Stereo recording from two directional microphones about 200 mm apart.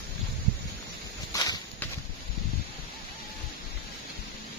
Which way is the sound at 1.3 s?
15° left (ahead or behind).